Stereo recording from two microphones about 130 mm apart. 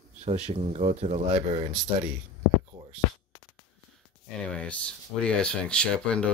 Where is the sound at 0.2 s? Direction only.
55° right (ahead or behind).